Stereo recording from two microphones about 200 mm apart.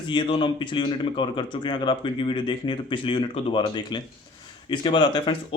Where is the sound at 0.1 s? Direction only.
25° left (ahead or behind).